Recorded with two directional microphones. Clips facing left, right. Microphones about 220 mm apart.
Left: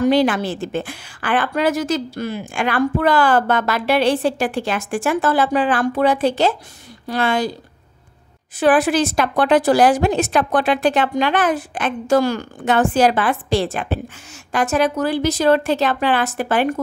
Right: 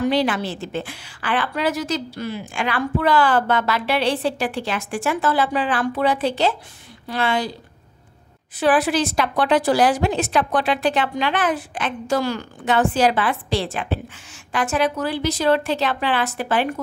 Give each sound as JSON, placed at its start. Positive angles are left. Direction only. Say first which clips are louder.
{"t": 0.0, "sound": "a woman's voice", "louder": "left 4 dB", "side_deg": 45}
{"t": 8.5, "sound": "a woman's voice", "louder": "left 3 dB", "side_deg": 50}